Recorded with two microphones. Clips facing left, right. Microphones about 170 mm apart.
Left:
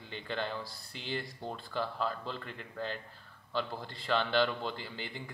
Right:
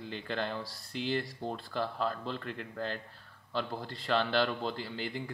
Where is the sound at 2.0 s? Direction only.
50° right (ahead or behind).